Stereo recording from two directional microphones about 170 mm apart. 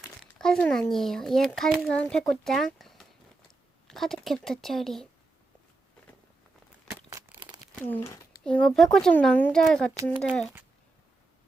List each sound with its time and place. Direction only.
0.0 s a child's voice: centre (ahead or behind)
6.9 s crumpling: 15° right (ahead or behind)
7.9 s speech: 15° left (ahead or behind)